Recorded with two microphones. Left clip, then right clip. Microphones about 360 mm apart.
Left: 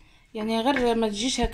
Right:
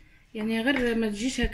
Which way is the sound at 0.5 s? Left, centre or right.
Centre.